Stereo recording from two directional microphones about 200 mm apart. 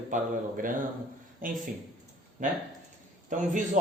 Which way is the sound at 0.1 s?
40° right (ahead or behind).